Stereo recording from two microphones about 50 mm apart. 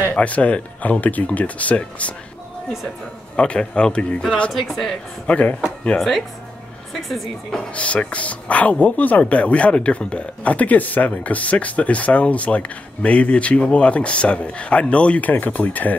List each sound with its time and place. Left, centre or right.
0.1 s speech: left
3.3 s speech: left
4.5 s speech: centre
5.2 s speech: left
5.9 s a woman's voice: centre
7.7 s speech: left